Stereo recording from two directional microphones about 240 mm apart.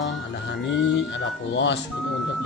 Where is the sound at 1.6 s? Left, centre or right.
Left.